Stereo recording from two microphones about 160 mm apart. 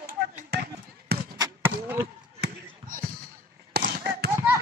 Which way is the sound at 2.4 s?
60° right (ahead or behind).